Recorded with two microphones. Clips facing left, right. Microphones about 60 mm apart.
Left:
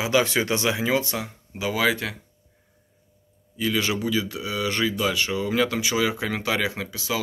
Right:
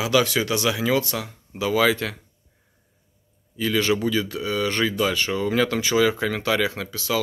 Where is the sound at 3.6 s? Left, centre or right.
Centre.